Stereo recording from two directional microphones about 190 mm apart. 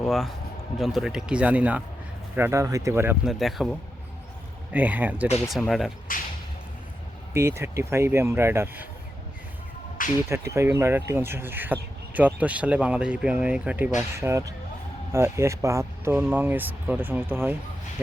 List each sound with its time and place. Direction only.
0.0 s speech: centre (ahead or behind)
3.3 s speech: centre (ahead or behind)
6.1 s speech: 45° left (ahead or behind)
7.3 s speech: 15° right (ahead or behind)
10.2 s speech: 15° right (ahead or behind)